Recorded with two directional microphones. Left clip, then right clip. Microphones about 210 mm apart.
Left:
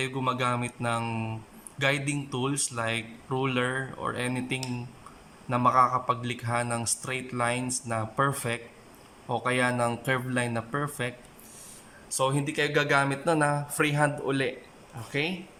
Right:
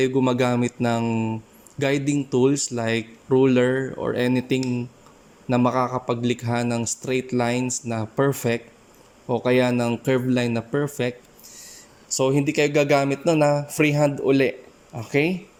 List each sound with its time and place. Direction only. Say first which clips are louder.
0.0 s speech: right 8 dB; 25° right (ahead or behind)
12.1 s speech: right 7 dB; 20° right (ahead or behind)